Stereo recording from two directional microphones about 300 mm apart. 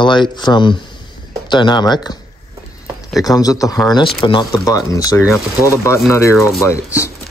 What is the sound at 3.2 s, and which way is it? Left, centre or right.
Speech, centre.